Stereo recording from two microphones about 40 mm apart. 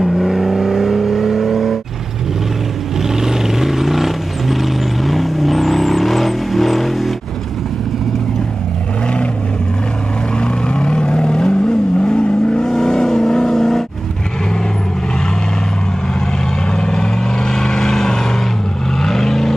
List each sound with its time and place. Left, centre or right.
0.0 s vehicle: centre
3.2 s vehicle: centre
10.4 s vehicle: left
16.7 s vehicle: centre